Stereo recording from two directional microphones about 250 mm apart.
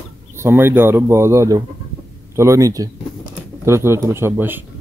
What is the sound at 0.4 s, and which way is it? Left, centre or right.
Speech, centre.